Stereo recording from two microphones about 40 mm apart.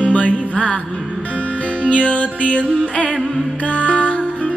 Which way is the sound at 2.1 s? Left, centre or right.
Left.